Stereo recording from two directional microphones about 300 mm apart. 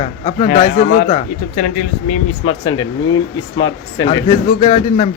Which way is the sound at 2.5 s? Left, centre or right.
Centre.